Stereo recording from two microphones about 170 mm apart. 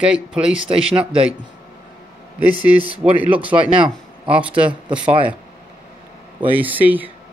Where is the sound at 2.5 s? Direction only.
30° right (ahead or behind).